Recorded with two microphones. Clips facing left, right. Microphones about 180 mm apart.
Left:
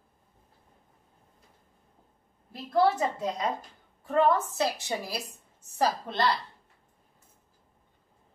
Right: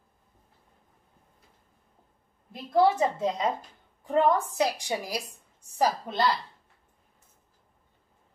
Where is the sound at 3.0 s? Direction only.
25° right (ahead or behind).